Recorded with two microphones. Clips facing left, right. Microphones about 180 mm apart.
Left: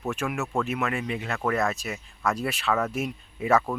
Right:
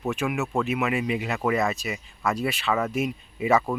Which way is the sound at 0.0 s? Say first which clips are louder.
Right 3 dB; centre (ahead or behind).